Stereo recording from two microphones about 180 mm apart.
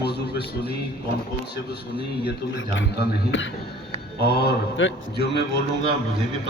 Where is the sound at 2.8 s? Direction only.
90° left.